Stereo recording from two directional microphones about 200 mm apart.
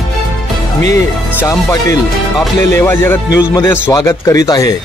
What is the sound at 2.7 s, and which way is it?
Speech, 10° left (ahead or behind).